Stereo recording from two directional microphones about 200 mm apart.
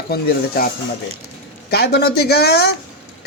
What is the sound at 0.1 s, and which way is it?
Speech, 45° left (ahead or behind).